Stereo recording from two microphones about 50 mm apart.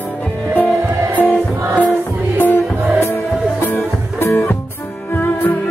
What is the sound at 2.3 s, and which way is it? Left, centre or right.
Music, left.